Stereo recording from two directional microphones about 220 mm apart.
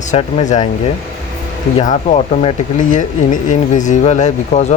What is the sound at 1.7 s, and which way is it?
Speech, 30° left (ahead or behind).